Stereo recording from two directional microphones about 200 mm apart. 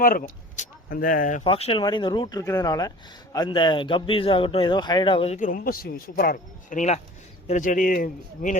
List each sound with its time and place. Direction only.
0.0 s speech: 45° left (ahead or behind)
1.5 s a man's voice: 30° left (ahead or behind)